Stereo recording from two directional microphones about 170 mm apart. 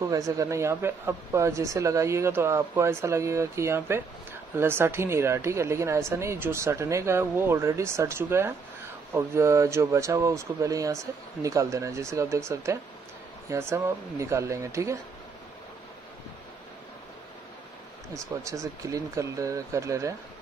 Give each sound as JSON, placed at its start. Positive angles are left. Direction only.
{"t": 0.0, "sound": "speech", "side_deg": -20}
{"t": 18.1, "sound": "speech", "side_deg": -20}